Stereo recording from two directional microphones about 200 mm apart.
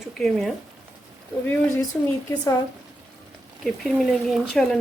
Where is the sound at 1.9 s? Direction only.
Centre (ahead or behind).